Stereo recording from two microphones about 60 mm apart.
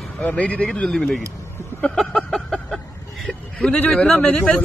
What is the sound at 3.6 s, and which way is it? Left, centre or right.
Speech, centre.